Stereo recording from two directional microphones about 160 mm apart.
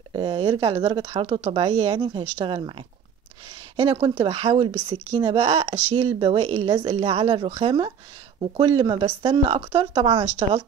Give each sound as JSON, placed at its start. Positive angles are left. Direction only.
{"t": 0.1, "sound": "speech", "side_deg": -30}
{"t": 3.7, "sound": "speech", "side_deg": -30}